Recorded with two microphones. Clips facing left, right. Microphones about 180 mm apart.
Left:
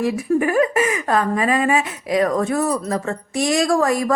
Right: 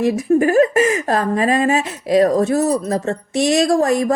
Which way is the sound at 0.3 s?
35° right (ahead or behind).